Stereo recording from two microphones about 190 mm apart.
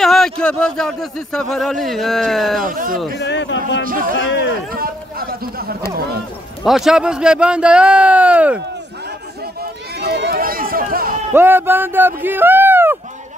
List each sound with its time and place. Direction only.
0.0 s speech: centre (ahead or behind)
2.7 s speech: 45° right (ahead or behind)
3.2 s a man's voice: 70° left (ahead or behind)
3.8 s speech: 45° right (ahead or behind)
4.1 s a man's voice: 75° left (ahead or behind)
4.7 s a sound: 50° right (ahead or behind)
6.6 s speech: centre (ahead or behind)
9.6 s run: 55° right (ahead or behind)
11.3 s speech: 10° right (ahead or behind)